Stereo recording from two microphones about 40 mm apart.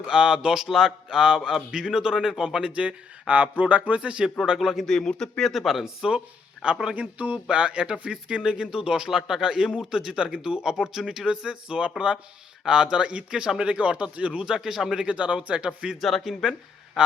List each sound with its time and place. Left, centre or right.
0.0 s speech: centre
4.4 s speech: centre
4.9 s speech: centre
5.5 s speech: centre
6.1 s speech: right
7.0 s a sound: right
7.3 s speech: right
14.4 s speech: centre
15.0 s speech: right
16.0 s speech: centre